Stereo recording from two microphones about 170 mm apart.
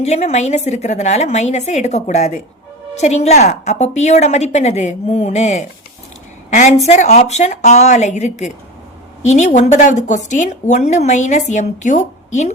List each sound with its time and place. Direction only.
0.0 s a woman's voice: 40° left (ahead or behind)